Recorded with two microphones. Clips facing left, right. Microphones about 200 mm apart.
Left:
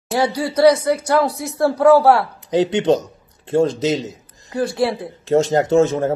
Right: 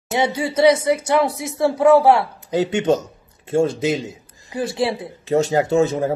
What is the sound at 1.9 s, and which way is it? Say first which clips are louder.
Speech: left 1 dB; 25° right (ahead or behind).